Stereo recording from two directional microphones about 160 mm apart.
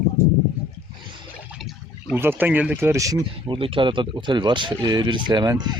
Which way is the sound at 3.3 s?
35° right (ahead or behind).